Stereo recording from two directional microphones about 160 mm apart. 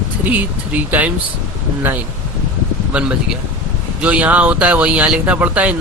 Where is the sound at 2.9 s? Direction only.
5° right (ahead or behind).